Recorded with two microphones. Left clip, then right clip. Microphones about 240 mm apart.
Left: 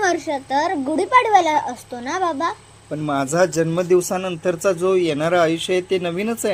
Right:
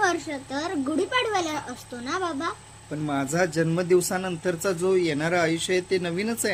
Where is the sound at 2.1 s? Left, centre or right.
Right.